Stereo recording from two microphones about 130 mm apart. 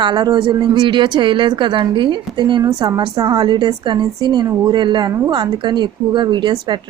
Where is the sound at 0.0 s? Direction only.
35° right (ahead or behind).